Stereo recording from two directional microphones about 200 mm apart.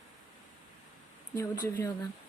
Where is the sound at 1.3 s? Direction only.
15° left (ahead or behind).